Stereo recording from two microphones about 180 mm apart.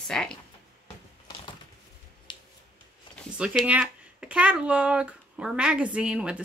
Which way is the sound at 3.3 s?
5° right (ahead or behind).